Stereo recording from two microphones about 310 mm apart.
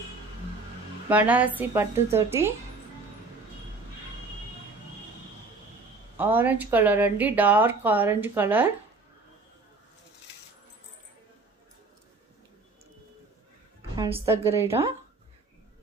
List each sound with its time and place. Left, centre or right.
1.0 s a woman's voice: centre
6.1 s speech: centre
13.9 s a woman's voice: centre